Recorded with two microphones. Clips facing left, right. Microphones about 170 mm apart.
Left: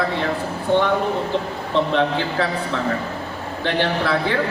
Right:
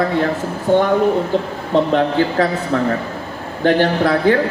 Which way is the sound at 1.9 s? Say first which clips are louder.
Right 5 dB; 45° right (ahead or behind).